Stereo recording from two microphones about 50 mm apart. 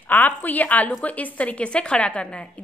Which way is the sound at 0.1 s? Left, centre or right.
Left.